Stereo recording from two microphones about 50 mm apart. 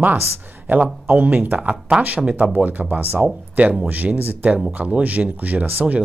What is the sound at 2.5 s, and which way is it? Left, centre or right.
Speech, right.